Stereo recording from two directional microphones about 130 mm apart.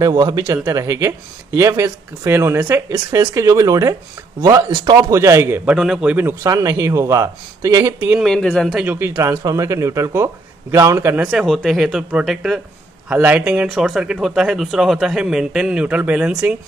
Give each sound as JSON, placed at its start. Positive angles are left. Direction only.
{"t": 0.0, "sound": "speech", "side_deg": -35}
{"t": 5.8, "sound": "a man's voice", "side_deg": -5}
{"t": 6.4, "sound": "speech", "side_deg": -25}
{"t": 8.2, "sound": "speech", "side_deg": 5}
{"t": 8.7, "sound": "speech", "side_deg": -15}
{"t": 11.2, "sound": "speech", "side_deg": 0}